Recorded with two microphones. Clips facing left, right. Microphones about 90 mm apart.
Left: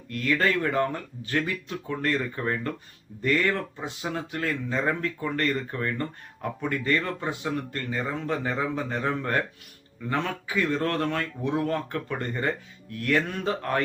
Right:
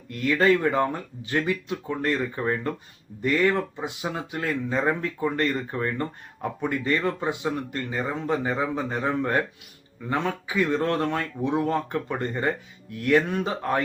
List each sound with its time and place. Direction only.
0.1 s speech: 20° right (ahead or behind)